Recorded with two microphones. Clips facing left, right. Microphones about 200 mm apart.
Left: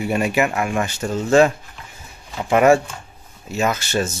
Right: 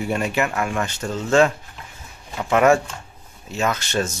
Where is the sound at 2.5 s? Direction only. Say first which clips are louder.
Left 2 dB; 10° left (ahead or behind).